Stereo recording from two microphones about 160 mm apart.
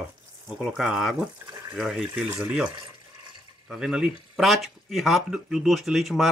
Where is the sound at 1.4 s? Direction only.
20° right (ahead or behind).